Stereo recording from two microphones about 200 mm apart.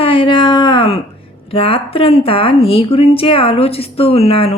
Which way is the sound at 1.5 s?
25° left (ahead or behind).